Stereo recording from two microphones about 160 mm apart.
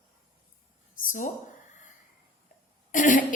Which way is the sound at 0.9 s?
55° left (ahead or behind).